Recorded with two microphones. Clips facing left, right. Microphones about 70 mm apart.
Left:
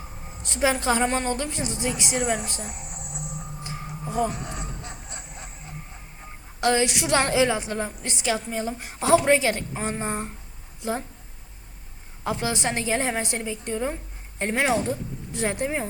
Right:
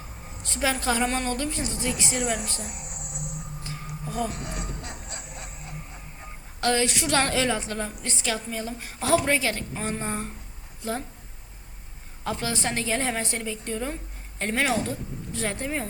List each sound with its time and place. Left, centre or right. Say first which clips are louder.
0.6 s a woman's voice: left 3 dB; left
2.6 s a sound: left 1 dB; centre
3.6 s a sound: left 3 dB; centre
4.3 s music: left 1 dB; centre
6.6 s a woman's voice: left 2 dB; left
12.2 s a woman's voice: left 2 dB; left